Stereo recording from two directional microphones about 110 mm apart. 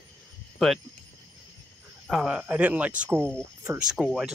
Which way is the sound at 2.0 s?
5° right (ahead or behind).